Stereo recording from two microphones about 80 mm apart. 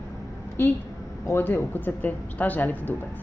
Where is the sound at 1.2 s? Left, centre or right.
Left.